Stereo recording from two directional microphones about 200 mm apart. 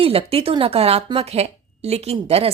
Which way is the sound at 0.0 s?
30° right (ahead or behind).